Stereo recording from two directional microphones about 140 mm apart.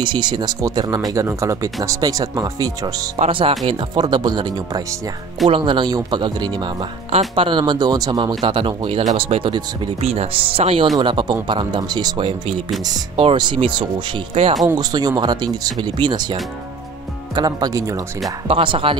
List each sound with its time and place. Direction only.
0.0 s speech: 35° right (ahead or behind)
3.2 s speech: 40° right (ahead or behind)
7.1 s speech: 45° right (ahead or behind)
14.3 s speech: 50° right (ahead or behind)
14.6 s speech: 30° right (ahead or behind)
17.4 s speech: 30° right (ahead or behind)
18.5 s speech: 40° right (ahead or behind)